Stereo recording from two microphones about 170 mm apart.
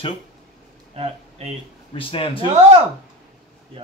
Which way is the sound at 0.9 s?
35° right (ahead or behind).